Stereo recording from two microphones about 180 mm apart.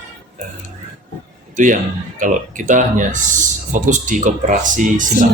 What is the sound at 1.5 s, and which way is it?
Speech, 45° right (ahead or behind).